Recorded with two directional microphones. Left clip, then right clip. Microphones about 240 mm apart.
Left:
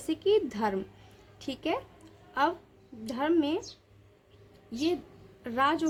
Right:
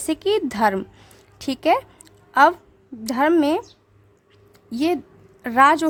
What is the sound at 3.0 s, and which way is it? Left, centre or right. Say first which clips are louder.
Speech: right 10 dB; right.